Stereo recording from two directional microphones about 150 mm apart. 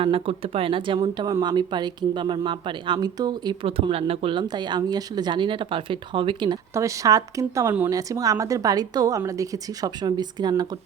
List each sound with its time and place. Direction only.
0.0 s speech: 40° right (ahead or behind)
6.7 s a woman's voice: 20° right (ahead or behind)